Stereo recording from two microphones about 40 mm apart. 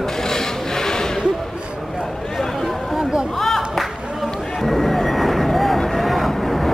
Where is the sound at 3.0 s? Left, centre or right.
Centre.